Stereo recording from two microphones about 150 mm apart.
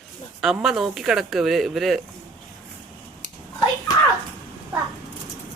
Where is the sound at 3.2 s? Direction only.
55° left (ahead or behind).